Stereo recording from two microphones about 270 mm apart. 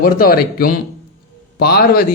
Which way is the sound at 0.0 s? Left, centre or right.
Left.